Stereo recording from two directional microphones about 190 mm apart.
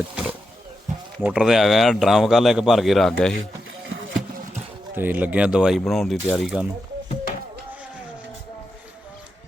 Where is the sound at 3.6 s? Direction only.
85° right.